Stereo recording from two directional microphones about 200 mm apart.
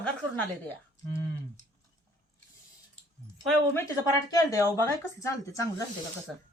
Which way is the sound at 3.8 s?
15° left (ahead or behind).